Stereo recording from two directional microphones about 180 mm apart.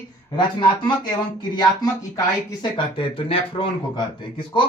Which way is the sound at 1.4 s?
20° left (ahead or behind).